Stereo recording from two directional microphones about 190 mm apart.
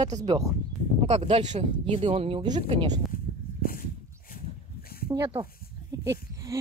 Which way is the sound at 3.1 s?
50° left (ahead or behind).